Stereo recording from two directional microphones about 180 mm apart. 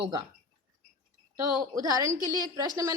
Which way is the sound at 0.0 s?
25° right (ahead or behind).